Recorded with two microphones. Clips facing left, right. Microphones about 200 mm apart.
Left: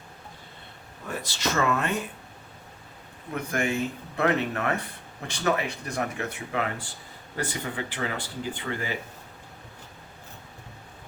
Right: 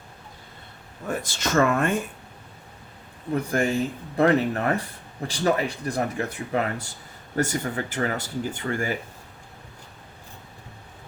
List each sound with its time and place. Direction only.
1.0 s speech: 50° right (ahead or behind)
3.5 s speech: 35° right (ahead or behind)